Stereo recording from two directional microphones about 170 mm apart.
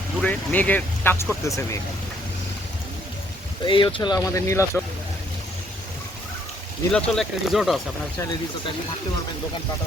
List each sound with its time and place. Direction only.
0.2 s speech: 10° left (ahead or behind)
3.6 s speech: 30° left (ahead or behind)
6.9 s speech: centre (ahead or behind)